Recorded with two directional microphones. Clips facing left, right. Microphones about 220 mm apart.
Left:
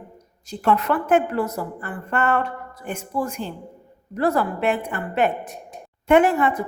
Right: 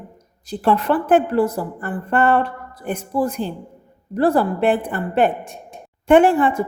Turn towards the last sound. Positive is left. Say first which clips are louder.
# right 3 dB
turn(degrees=-30)  # may be behind; listen again after turning